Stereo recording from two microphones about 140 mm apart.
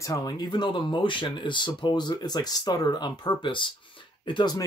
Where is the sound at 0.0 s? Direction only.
25° left (ahead or behind).